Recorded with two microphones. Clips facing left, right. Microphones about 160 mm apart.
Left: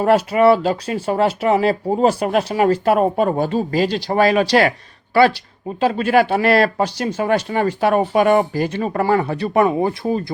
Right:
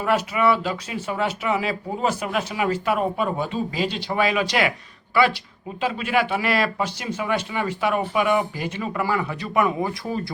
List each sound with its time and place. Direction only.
0.0 s speech: 40° left (ahead or behind)
5.8 s speech: 35° left (ahead or behind)